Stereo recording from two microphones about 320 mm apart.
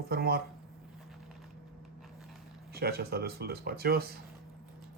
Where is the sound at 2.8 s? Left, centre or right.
Right.